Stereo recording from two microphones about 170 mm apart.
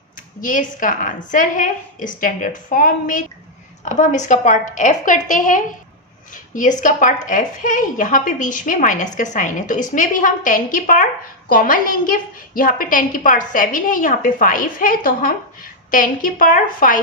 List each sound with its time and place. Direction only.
0.4 s a woman's voice: 50° left (ahead or behind)